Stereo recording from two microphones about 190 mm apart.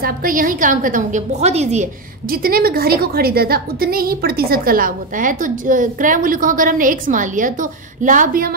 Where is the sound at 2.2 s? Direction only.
50° right (ahead or behind).